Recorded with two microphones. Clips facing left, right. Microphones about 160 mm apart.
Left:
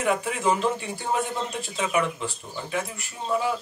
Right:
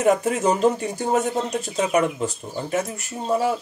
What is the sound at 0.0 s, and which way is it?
Speech, 45° right (ahead or behind).